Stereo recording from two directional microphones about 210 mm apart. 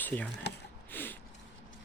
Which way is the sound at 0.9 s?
10° left (ahead or behind).